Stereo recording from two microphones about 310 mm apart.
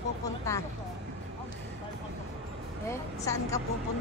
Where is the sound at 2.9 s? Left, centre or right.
Centre.